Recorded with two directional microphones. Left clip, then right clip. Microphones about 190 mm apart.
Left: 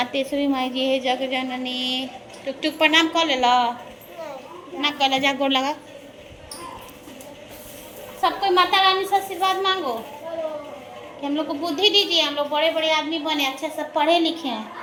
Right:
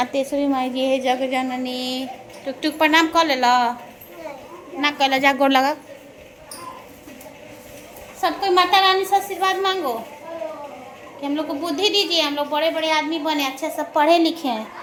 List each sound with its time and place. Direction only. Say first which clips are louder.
0.0 s a woman's voice: right 2 dB; 15° right (ahead or behind)
4.8 s a woman's voice: right 2 dB; 25° right (ahead or behind)
8.2 s a woman's voice: right 1 dB; 20° right (ahead or behind)
11.2 s a woman's voice: right 1 dB; 25° right (ahead or behind)